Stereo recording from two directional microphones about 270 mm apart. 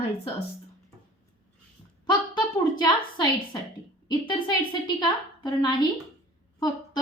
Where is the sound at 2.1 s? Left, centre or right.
Centre.